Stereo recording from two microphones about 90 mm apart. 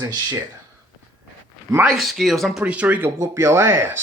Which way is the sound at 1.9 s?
Centre (ahead or behind).